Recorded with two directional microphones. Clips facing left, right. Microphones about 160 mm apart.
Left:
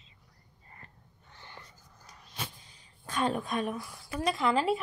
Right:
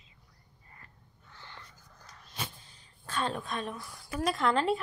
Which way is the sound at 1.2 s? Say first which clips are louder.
Even; 15° left (ahead or behind).